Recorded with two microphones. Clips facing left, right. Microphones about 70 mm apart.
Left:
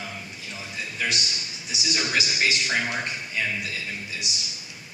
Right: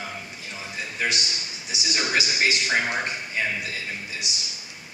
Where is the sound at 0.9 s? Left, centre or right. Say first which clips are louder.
Right 2 dB; right.